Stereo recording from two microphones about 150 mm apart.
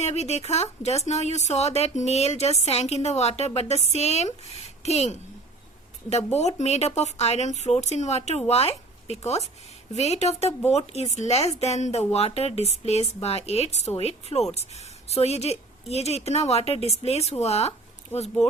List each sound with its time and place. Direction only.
0.0 s a woman's voice: 45° left (ahead or behind)
4.6 s a sound: 45° left (ahead or behind)
6.1 s a woman's voice: 45° left (ahead or behind)